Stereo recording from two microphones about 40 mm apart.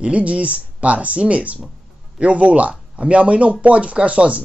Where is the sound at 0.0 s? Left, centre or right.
Right.